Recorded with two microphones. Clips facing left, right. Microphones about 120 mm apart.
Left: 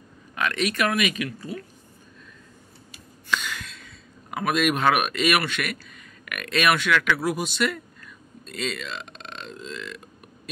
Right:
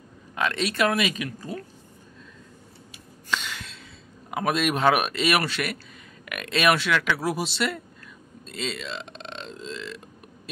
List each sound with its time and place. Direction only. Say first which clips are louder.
0.4 s speech: even; 30° right (ahead or behind)
3.3 s a sound: left 2 dB; 30° right (ahead or behind)
4.3 s speech: left 1 dB; 25° right (ahead or behind)
8.5 s burping: left 1 dB; 25° right (ahead or behind)